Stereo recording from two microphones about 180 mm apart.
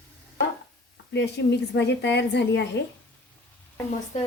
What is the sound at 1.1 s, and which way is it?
A woman's voice, 70° left (ahead or behind).